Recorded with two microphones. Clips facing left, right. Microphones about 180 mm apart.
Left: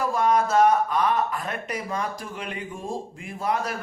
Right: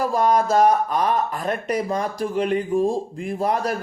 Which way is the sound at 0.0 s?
35° right (ahead or behind).